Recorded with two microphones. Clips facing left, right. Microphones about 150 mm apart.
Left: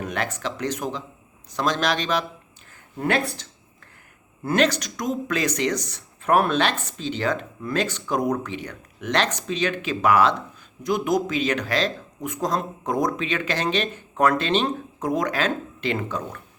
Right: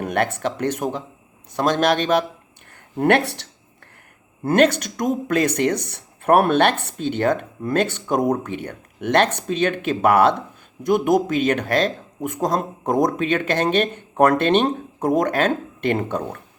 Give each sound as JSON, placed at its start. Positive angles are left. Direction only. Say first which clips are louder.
{"t": 0.0, "sound": "a sound", "louder": "right 6 dB", "side_deg": -55}
{"t": 0.3, "sound": "speech", "louder": "right 5 dB", "side_deg": -55}
{"t": 3.0, "sound": "speech", "louder": "right 6 dB", "side_deg": -65}
{"t": 4.4, "sound": "speech", "louder": "right 5 dB", "side_deg": -55}